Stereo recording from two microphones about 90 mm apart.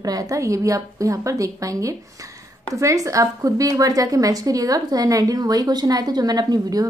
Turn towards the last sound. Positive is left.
turn(degrees=-45)  # may be behind; listen again after turning